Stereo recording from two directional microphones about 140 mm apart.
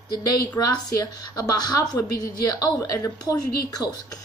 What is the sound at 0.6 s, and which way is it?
A woman's voice, 25° left (ahead or behind).